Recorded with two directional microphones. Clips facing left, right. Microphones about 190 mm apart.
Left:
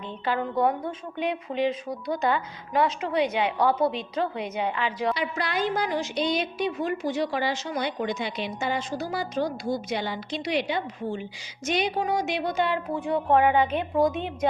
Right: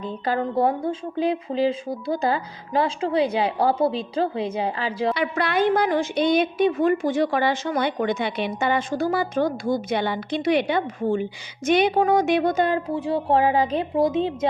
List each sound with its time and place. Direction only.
0.0 s a woman's voice: 40° right (ahead or behind)
5.1 s a woman's voice: 60° right (ahead or behind); by 14.3 s 30° right (ahead or behind)